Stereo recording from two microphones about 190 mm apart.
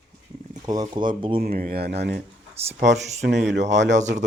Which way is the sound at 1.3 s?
50° right (ahead or behind).